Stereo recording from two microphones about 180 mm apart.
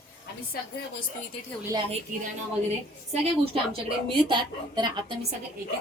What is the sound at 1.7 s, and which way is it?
Speech, 25° right (ahead or behind).